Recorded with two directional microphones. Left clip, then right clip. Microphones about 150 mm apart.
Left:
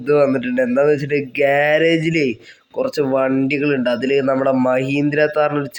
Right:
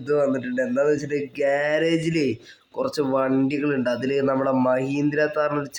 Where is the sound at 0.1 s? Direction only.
25° left (ahead or behind).